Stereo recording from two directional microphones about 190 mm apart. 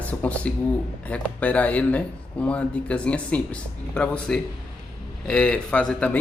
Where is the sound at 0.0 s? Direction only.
5° left (ahead or behind).